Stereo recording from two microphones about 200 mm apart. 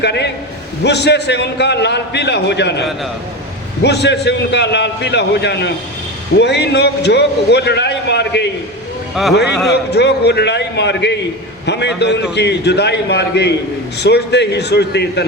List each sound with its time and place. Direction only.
0.0 s a man's voice: 60° left (ahead or behind)
3.8 s a man's voice: 60° left (ahead or behind)
9.5 s a man's voice: centre (ahead or behind)
9.7 s a man's voice: 55° left (ahead or behind)